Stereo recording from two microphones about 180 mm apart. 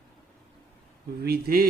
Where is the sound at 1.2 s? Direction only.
60° right (ahead or behind).